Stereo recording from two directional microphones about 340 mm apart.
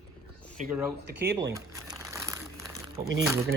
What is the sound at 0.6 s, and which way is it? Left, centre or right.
Speech, right.